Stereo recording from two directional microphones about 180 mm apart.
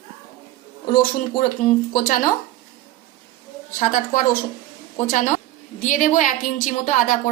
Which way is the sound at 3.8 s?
50° left (ahead or behind).